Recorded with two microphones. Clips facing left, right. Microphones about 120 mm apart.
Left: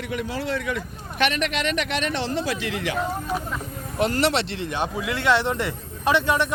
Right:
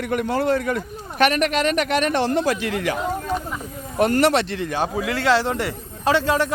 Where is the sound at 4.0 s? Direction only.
50° right (ahead or behind); by 5.7 s 30° right (ahead or behind).